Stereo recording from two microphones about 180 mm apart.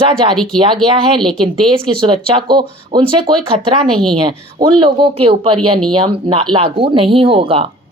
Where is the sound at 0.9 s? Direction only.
25° right (ahead or behind).